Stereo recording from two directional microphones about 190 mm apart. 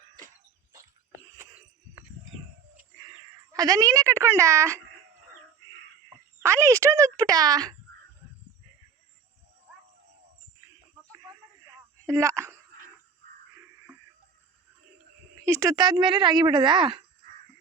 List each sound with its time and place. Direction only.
3.5 s a child's voice: 20° right (ahead or behind)
6.1 s speech: 15° right (ahead or behind)
12.0 s a child's voice: 15° right (ahead or behind)
15.4 s a woman's voice: 15° right (ahead or behind)